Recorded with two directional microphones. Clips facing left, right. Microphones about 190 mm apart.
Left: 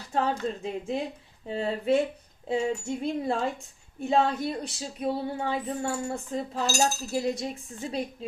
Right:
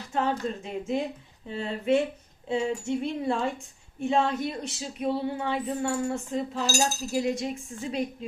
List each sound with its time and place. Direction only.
0.1 s speech: 35° left (ahead or behind)